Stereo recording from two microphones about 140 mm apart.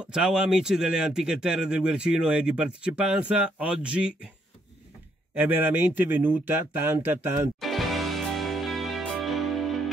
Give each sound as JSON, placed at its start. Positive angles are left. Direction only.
{"t": 0.0, "sound": "a man's voice", "side_deg": -5}
{"t": 5.3, "sound": "a man's voice", "side_deg": -15}
{"t": 7.6, "sound": "music", "side_deg": 0}